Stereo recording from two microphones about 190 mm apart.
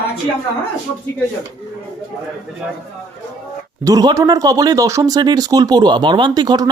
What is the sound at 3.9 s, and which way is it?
Speech, 20° right (ahead or behind).